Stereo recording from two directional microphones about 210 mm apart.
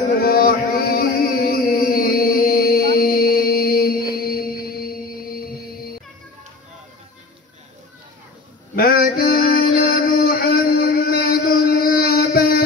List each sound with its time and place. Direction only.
0.2 s chant: 45° left (ahead or behind)
4.1 s music: 45° left (ahead or behind)
8.7 s a sound: 45° left (ahead or behind)